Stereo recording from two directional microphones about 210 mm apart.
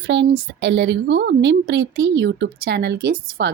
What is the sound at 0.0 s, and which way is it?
Speech, 60° right (ahead or behind).